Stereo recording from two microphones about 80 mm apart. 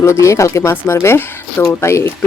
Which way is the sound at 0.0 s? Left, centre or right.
Left.